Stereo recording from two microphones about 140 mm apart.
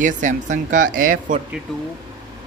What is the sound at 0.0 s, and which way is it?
Speech, 65° right (ahead or behind).